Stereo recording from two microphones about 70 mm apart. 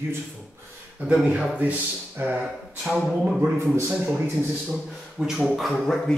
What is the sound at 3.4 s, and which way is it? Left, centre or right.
Speech, right.